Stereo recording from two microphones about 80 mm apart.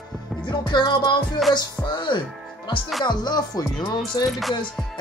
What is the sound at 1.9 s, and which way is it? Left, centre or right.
Speech, left.